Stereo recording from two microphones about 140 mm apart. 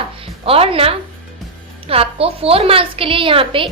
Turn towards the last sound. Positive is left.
turn(degrees=-40)  # may be behind; listen again after turning